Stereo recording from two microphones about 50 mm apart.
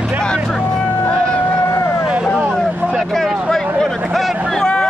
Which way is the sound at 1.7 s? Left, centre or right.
Left.